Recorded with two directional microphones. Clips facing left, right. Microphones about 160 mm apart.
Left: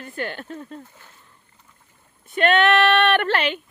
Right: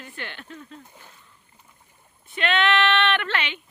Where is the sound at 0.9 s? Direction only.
15° right (ahead or behind).